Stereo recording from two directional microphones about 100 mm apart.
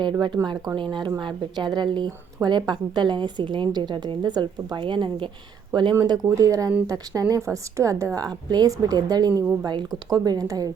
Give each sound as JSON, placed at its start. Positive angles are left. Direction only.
{"t": 0.0, "sound": "speech", "side_deg": -50}
{"t": 6.1, "sound": "a woman's voice", "side_deg": -35}